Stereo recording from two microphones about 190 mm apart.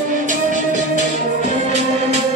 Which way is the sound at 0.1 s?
40° right (ahead or behind).